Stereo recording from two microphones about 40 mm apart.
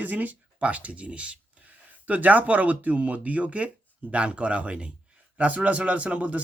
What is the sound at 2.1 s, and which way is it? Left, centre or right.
Speech, right.